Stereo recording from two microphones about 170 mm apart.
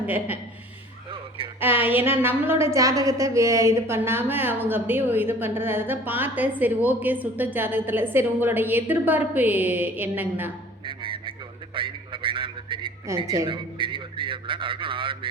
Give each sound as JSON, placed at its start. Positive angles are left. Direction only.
{"t": 0.0, "sound": "a woman's voice", "side_deg": -10}
{"t": 1.6, "sound": "a woman's voice", "side_deg": -10}
{"t": 10.8, "sound": "radio", "side_deg": -30}
{"t": 13.2, "sound": "a man's voice", "side_deg": -20}